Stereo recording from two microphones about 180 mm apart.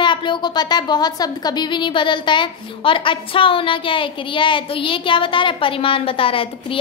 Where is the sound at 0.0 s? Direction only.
25° left (ahead or behind).